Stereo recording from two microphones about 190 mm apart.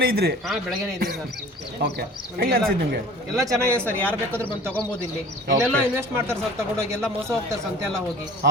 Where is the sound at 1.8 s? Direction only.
55° right (ahead or behind).